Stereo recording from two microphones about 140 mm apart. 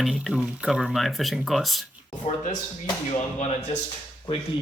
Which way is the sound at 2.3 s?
55° left (ahead or behind).